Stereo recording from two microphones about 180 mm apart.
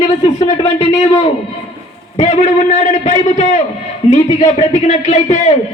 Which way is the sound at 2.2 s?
40° left (ahead or behind).